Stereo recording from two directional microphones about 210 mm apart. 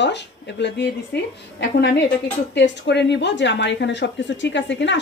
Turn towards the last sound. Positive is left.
turn(degrees=60)  # may be behind; listen again after turning